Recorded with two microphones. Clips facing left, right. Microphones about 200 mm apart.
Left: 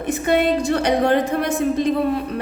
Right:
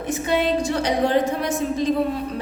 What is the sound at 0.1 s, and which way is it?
A woman's voice, 55° left (ahead or behind).